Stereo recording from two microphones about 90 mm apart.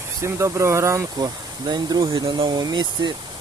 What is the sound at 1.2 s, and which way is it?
Speech, 50° right (ahead or behind).